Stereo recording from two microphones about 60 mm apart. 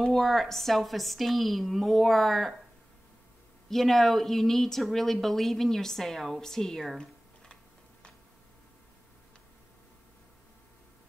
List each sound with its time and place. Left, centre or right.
0.0 s a woman's voice: centre
3.6 s a woman's voice: centre